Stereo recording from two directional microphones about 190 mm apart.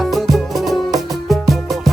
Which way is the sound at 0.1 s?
Centre (ahead or behind).